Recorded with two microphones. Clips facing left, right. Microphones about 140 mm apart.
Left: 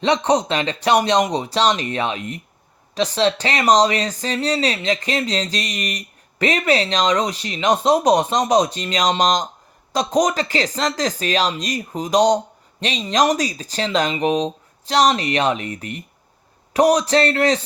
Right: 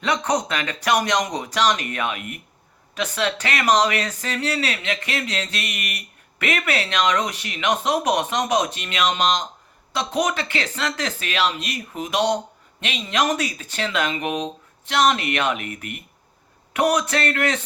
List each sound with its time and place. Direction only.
0.0 s speech: 30° left (ahead or behind)